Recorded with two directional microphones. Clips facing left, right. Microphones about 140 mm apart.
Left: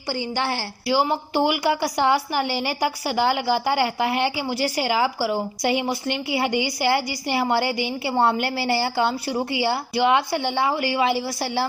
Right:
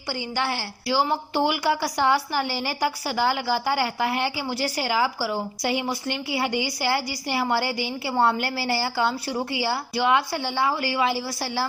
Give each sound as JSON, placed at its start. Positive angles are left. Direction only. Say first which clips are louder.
{"t": 0.1, "sound": "a woman's voice", "louder": "left 2 dB", "side_deg": 30}
{"t": 0.9, "sound": "a woman's voice", "louder": "left 2 dB", "side_deg": 15}